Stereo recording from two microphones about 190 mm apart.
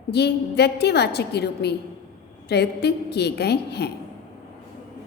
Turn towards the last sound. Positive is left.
turn(degrees=60)  # may be behind; listen again after turning